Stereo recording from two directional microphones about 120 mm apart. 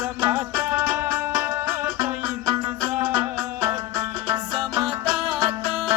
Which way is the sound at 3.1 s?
25° right (ahead or behind).